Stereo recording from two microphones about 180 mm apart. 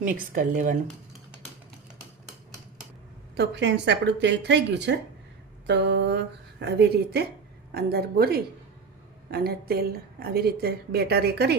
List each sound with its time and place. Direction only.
0.0 s speech: 45° right (ahead or behind)
3.3 s a woman's voice: 75° right (ahead or behind)